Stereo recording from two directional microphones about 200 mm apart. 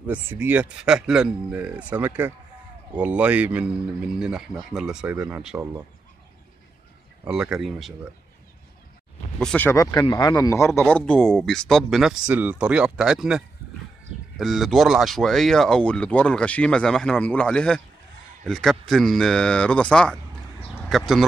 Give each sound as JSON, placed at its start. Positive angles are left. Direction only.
{"t": 0.0, "sound": "speech", "side_deg": -10}
{"t": 7.2, "sound": "speech", "side_deg": -5}
{"t": 9.4, "sound": "speech", "side_deg": 5}